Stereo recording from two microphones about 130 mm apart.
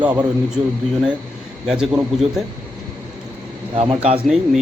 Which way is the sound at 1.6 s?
5° right (ahead or behind).